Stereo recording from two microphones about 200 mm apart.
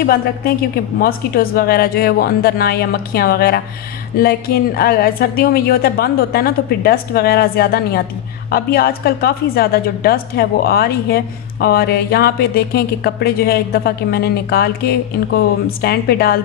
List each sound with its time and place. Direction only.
0.0 s a woman's voice: 50° left (ahead or behind)